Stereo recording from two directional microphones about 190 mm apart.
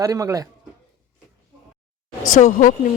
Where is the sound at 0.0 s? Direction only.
20° right (ahead or behind).